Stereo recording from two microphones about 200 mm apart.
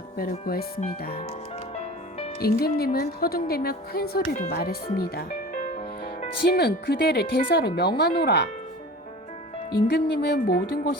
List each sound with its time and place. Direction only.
0.2 s speech: 45° left (ahead or behind)
1.7 s music: 30° left (ahead or behind)
2.4 s speech: 50° left (ahead or behind)
4.4 s speech: 40° left (ahead or behind); by 8.4 s 55° left (ahead or behind)
9.7 s speech: 55° left (ahead or behind)